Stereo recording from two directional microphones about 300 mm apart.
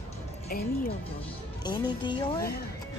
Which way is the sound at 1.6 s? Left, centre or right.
Centre.